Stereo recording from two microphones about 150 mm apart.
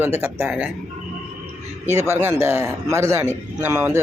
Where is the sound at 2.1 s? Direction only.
15° right (ahead or behind).